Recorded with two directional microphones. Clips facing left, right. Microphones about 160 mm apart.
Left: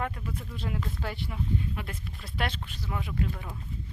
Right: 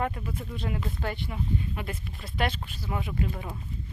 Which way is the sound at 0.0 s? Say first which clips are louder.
Right 3 dB; 5° right (ahead or behind).